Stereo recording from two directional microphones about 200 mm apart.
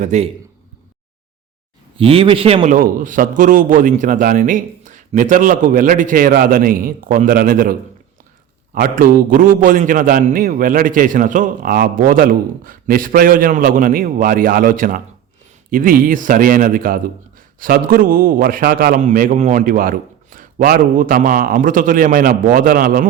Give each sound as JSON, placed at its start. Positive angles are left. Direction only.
{"t": 0.0, "sound": "a man's voice", "side_deg": -35}
{"t": 2.0, "sound": "a man's voice", "side_deg": -30}
{"t": 2.7, "sound": "a man's voice", "side_deg": -40}